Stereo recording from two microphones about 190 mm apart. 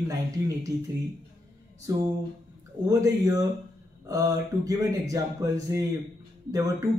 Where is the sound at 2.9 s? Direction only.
15° right (ahead or behind).